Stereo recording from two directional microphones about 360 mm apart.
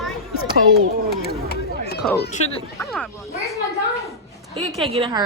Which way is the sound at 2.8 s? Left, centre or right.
Centre.